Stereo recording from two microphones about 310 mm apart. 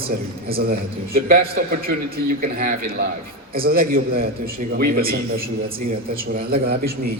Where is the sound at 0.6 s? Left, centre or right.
Right.